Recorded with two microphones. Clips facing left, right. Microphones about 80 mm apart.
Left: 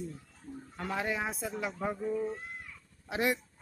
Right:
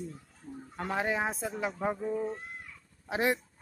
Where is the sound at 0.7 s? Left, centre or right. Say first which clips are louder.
Right 3 dB; right.